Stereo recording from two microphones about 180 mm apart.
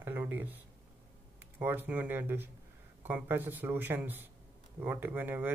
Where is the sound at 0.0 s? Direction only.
10° right (ahead or behind).